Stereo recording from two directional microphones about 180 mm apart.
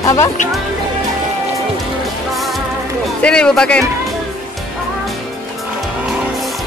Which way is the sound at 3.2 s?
5° left (ahead or behind).